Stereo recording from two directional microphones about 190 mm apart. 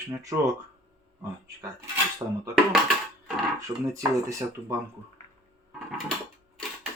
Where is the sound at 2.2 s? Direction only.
25° right (ahead or behind).